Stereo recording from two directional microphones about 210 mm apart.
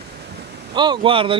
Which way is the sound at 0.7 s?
20° right (ahead or behind).